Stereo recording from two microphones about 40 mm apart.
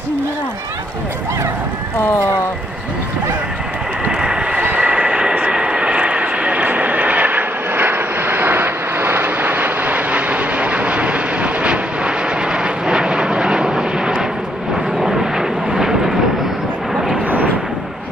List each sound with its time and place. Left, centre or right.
4.1 s vehicle: centre